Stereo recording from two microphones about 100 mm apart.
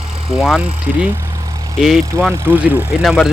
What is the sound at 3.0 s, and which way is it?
Speech, centre (ahead or behind).